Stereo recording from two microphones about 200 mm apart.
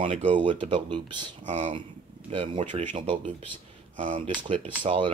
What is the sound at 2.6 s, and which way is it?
Speech, 35° right (ahead or behind).